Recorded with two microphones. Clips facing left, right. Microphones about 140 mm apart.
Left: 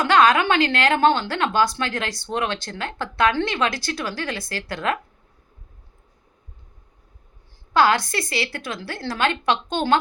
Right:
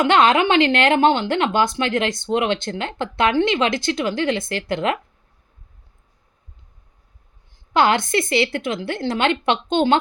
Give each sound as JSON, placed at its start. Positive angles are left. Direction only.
{"t": 0.0, "sound": "a woman's voice", "side_deg": -25}
{"t": 7.7, "sound": "a woman's voice", "side_deg": -25}